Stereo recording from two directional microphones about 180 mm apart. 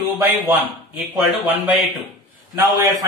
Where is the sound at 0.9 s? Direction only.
10° right (ahead or behind).